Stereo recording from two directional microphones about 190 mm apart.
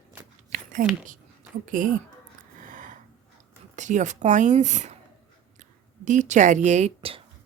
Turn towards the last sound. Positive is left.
turn(degrees=-30)  # may be behind; listen again after turning